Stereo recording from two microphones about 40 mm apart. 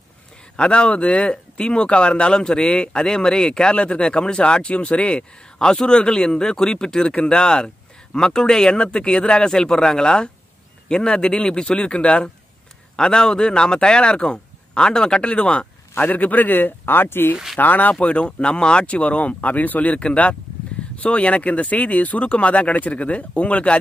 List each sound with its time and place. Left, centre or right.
0.6 s speech: left
1.3 s speech: left
3.7 s speech: left
16.0 s speech: left
17.6 s speech: left
18.0 s speech: left